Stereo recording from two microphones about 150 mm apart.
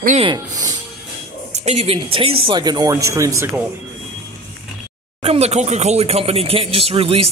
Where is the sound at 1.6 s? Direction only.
45° right (ahead or behind); by 3.5 s 20° right (ahead or behind).